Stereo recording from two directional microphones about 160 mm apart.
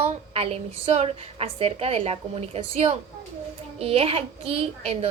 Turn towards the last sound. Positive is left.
turn(degrees=-40)  # may be behind; listen again after turning